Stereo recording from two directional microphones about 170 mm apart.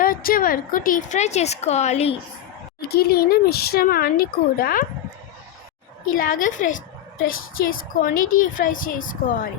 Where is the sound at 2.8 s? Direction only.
65° left (ahead or behind).